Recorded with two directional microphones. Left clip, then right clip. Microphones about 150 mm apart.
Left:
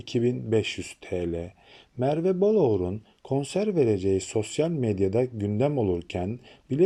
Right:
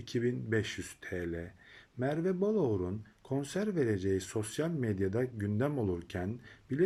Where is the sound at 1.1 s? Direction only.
45° right (ahead or behind).